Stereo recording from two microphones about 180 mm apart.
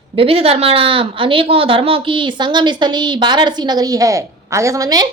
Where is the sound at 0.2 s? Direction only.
30° right (ahead or behind).